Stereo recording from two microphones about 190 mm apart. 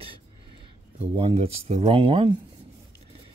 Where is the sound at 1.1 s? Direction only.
30° right (ahead or behind).